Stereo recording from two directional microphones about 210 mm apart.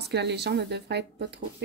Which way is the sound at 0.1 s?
55° right (ahead or behind).